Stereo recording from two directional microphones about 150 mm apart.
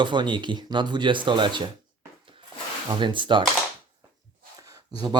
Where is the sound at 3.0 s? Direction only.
30° right (ahead or behind).